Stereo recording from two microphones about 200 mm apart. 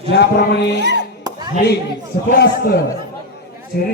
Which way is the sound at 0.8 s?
60° right (ahead or behind).